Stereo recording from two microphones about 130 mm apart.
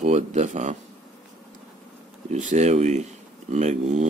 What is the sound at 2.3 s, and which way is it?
Speech, 65° right (ahead or behind).